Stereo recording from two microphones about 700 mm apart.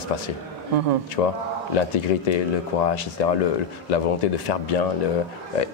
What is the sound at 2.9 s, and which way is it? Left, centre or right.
Speech, left.